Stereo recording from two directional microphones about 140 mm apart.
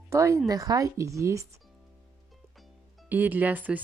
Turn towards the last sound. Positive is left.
turn(degrees=-10)  # may be behind; listen again after turning